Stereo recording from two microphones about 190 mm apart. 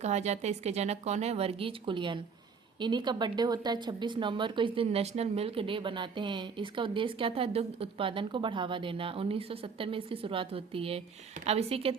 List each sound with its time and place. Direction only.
0.0 s speech: 35° right (ahead or behind)